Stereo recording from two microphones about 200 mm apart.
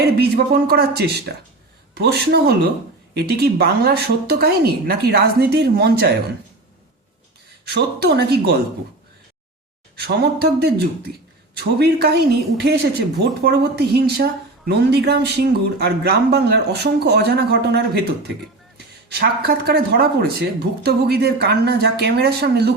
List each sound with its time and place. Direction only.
0.0 s speech: 50° right (ahead or behind)
7.7 s speech: 55° right (ahead or behind)
9.9 s speech: 55° right (ahead or behind)
19.1 s speech: 50° right (ahead or behind)